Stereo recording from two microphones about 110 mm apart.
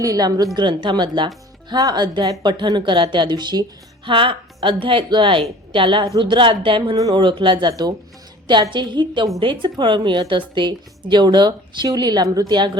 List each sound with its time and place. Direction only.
0.0 s a woman's voice: 35° right (ahead or behind); by 6.9 s 50° right (ahead or behind)
6.9 s speech: 35° right (ahead or behind)
7.2 s a woman's voice: 50° right (ahead or behind)